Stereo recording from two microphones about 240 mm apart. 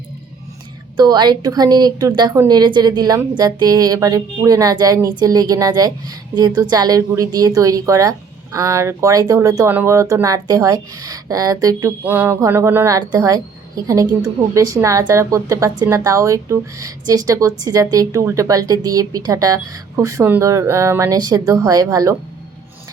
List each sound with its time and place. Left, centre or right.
0.9 s a woman's voice: centre